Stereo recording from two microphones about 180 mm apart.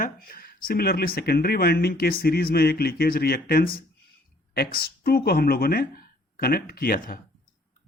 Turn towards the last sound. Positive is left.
turn(degrees=55)  # may be behind; listen again after turning